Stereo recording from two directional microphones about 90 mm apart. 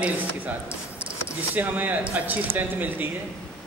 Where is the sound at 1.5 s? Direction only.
20° right (ahead or behind).